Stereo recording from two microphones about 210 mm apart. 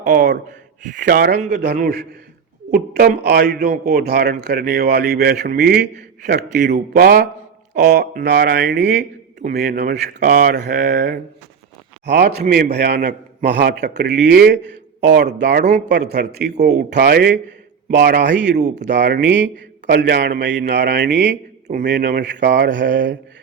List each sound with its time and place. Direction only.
0.0 s a man's voice: 40° right (ahead or behind)
14.7 s a sound: 55° right (ahead or behind)
15.4 s a man's voice: 55° right (ahead or behind)